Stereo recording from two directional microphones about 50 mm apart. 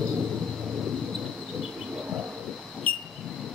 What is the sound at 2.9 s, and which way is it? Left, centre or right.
Vehicle, left.